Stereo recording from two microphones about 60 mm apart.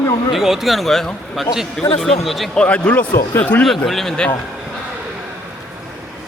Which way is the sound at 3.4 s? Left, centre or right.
Left.